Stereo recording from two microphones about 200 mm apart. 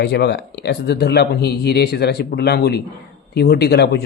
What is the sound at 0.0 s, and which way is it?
Speech, 55° left (ahead or behind).